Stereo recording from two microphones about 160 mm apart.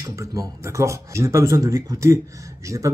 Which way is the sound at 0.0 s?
20° right (ahead or behind).